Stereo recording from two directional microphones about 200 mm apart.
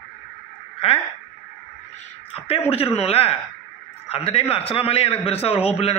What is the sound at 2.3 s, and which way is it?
A man's voice, 30° left (ahead or behind).